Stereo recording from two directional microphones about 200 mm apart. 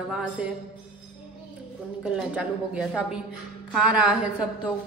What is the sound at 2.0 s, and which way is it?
A woman's voice, 5° right (ahead or behind).